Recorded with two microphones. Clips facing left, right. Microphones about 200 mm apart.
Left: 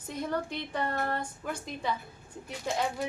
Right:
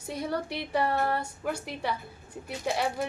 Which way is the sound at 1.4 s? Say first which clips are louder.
Right 4 dB; 70° right (ahead or behind).